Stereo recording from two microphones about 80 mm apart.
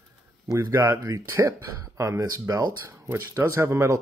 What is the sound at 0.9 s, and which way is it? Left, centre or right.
Speech, right.